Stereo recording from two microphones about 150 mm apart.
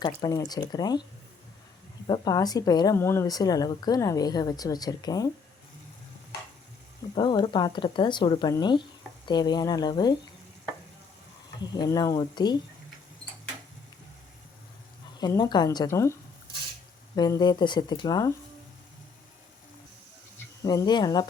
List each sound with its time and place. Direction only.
0.0 s speech: 25° left (ahead or behind)
2.0 s speech: 30° left (ahead or behind)
7.2 s speech: 30° left (ahead or behind)
11.6 s speech: 25° left (ahead or behind)
15.2 s speech: 25° left (ahead or behind)
17.2 s speech: 25° left (ahead or behind)
20.6 s speech: 25° left (ahead or behind)